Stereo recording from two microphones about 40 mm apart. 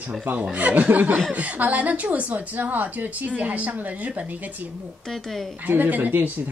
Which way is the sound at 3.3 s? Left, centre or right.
Right.